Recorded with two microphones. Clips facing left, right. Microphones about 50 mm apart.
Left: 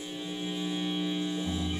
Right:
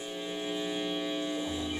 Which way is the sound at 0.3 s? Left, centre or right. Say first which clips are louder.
Even; centre.